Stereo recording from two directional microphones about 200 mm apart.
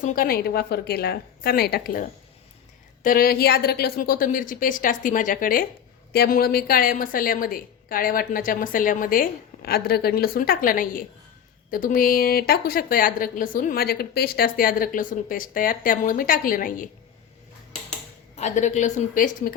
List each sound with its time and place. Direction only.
0.0 s a woman's voice: 45° left (ahead or behind)
18.3 s a woman's voice: 35° left (ahead or behind)